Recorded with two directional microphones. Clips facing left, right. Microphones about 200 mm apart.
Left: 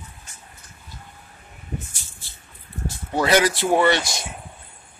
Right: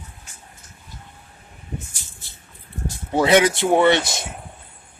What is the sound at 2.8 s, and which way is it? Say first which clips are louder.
Speech: right 3 dB; 20° right (ahead or behind).